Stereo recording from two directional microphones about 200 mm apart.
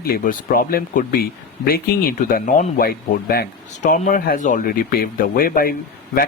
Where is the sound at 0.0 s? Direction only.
45° left (ahead or behind).